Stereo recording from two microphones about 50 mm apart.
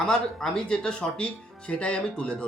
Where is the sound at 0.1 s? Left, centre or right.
Centre.